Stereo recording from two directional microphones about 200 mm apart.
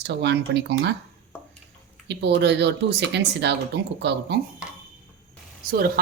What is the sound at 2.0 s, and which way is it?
Speech, 55° right (ahead or behind).